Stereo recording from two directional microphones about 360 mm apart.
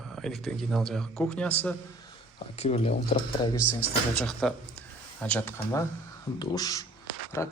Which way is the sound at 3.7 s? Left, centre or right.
Centre.